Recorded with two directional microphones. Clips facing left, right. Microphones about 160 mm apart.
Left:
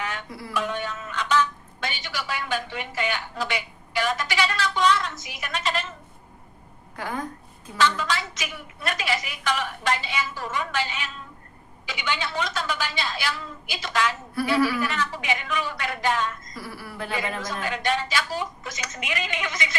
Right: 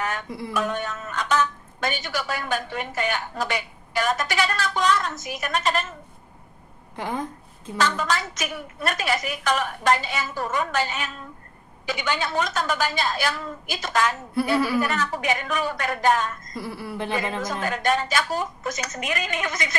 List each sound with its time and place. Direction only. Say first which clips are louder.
0.5 s speech: right 1 dB; 45° right (ahead or behind)
7.0 s a woman's voice: right 2 dB; 20° right (ahead or behind)
7.7 s a woman's voice: even; 45° right (ahead or behind)
16.5 s a woman's voice: right 5 dB; 25° right (ahead or behind)
17.4 s a woman's voice: right 3 dB; 45° right (ahead or behind)